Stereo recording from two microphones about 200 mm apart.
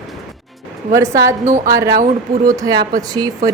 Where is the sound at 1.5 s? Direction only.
35° right (ahead or behind).